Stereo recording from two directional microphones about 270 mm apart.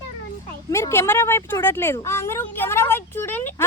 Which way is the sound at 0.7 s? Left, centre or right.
Centre.